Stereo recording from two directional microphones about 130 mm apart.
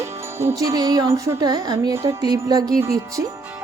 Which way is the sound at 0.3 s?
20° right (ahead or behind).